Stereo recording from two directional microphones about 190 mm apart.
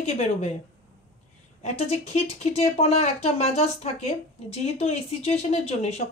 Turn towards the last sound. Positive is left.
turn(degrees=35)  # may be behind; listen again after turning